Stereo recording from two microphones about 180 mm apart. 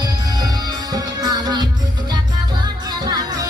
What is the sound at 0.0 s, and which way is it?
Music, 20° right (ahead or behind).